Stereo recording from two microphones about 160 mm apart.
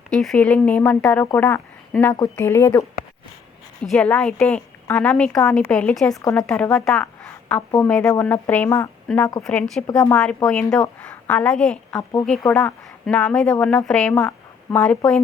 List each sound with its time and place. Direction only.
0.1 s speech: 5° left (ahead or behind)
3.8 s a woman's voice: 5° left (ahead or behind)
9.4 s a woman's voice: 5° left (ahead or behind)